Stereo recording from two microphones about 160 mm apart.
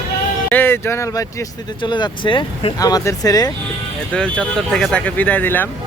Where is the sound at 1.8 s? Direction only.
30° left (ahead or behind).